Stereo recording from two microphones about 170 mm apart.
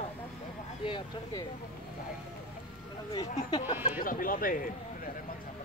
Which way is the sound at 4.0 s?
55° left (ahead or behind).